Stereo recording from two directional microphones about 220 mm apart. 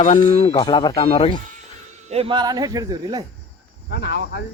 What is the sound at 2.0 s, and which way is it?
Speech, 25° right (ahead or behind).